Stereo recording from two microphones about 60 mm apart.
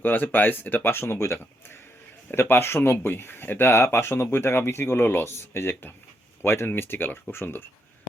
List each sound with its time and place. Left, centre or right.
0.0 s speech: left